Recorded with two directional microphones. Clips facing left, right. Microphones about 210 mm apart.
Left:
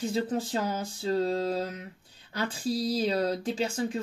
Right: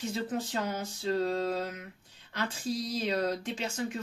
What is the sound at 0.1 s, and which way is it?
Speech, 30° left (ahead or behind).